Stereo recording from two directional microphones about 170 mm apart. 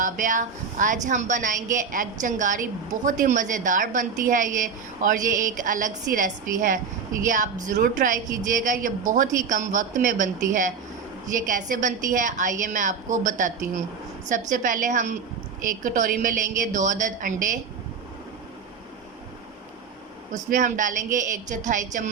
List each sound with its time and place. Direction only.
0.0 s speech: 50° right (ahead or behind)
20.3 s speech: 45° right (ahead or behind)